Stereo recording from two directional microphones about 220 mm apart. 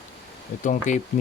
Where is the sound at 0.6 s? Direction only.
35° left (ahead or behind).